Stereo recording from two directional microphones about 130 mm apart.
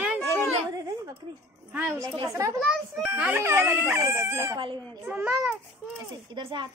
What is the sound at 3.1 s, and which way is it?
Speech, 10° right (ahead or behind).